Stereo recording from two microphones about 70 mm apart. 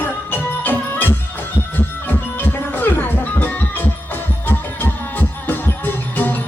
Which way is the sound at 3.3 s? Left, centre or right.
Left.